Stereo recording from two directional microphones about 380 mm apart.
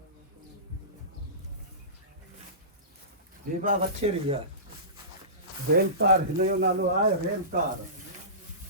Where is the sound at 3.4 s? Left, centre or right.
Right.